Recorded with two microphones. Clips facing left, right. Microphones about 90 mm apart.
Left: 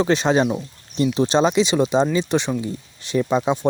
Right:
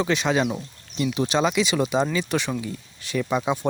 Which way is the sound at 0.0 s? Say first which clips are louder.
Left 4 dB; 35° left (ahead or behind).